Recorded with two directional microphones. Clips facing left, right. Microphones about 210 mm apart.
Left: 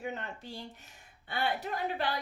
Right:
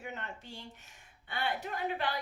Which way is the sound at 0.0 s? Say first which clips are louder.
Left 4 dB; 35° left (ahead or behind).